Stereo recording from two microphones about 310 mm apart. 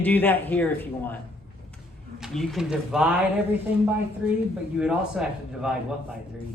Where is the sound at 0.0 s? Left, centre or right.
Centre.